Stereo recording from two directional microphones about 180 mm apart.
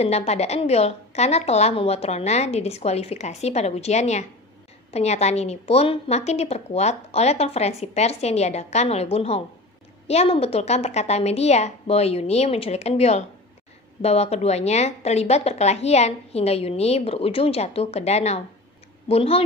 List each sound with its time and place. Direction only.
0.0 s a woman's voice: 35° left (ahead or behind)